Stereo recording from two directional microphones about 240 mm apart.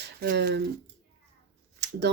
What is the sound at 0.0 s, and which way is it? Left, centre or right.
Speech, right.